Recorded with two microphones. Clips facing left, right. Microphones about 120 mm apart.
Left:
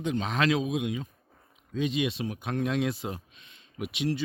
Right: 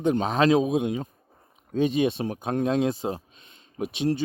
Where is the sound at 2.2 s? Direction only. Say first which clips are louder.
Right 5 dB; 40° right (ahead or behind).